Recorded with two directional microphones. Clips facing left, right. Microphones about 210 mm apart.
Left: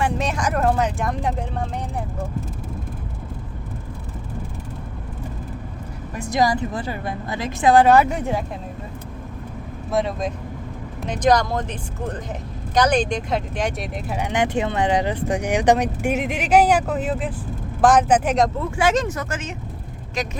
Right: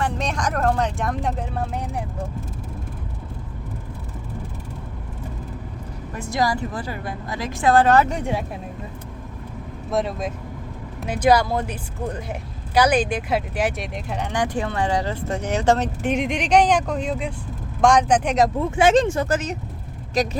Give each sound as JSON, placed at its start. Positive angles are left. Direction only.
{"t": 0.0, "sound": "speech", "side_deg": 5}
{"t": 6.1, "sound": "a woman's voice", "side_deg": 15}
{"t": 9.9, "sound": "a woman's voice", "side_deg": 0}
{"t": 14.3, "sound": "speech", "side_deg": 20}
{"t": 18.8, "sound": "speech", "side_deg": -25}